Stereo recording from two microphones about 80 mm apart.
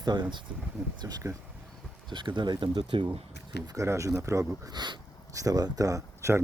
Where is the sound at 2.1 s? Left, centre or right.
Right.